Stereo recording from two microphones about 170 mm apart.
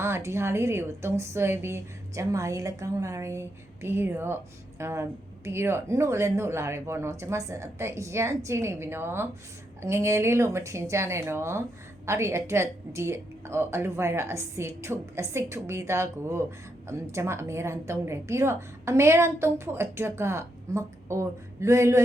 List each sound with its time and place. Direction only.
0.0 s a woman's voice: 15° right (ahead or behind)